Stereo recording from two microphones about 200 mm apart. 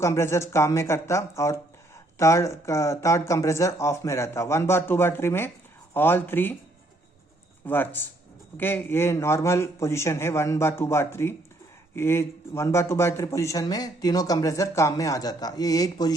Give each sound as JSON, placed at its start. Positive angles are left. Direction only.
{"t": 0.0, "sound": "speech", "side_deg": 15}
{"t": 7.6, "sound": "speech", "side_deg": 10}